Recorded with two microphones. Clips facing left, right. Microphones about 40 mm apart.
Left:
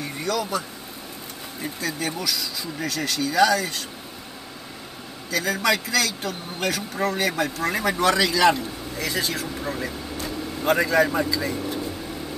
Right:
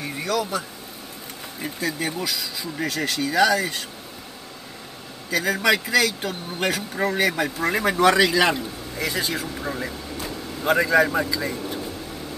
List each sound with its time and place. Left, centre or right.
0.0 s vehicle: centre
1.6 s speech: centre
5.3 s a man's voice: centre